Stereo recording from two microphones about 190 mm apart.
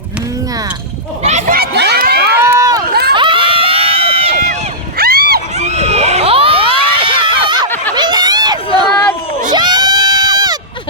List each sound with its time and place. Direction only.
1.2 s a sound: 40° right (ahead or behind)
1.5 s crowd: 55° right (ahead or behind)
2.4 s run: 15° right (ahead or behind)
2.9 s run: 55° right (ahead or behind)
3.2 s crowd: 25° right (ahead or behind)
4.9 s a sound: 50° right (ahead or behind)
5.5 s children shouting: 35° right (ahead or behind)
7.9 s a sound: 20° right (ahead or behind)
9.5 s crowd: 20° right (ahead or behind)